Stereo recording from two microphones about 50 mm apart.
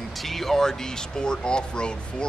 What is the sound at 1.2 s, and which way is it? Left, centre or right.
Speech, centre.